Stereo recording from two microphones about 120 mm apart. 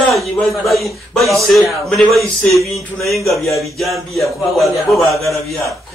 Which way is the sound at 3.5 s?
Centre (ahead or behind).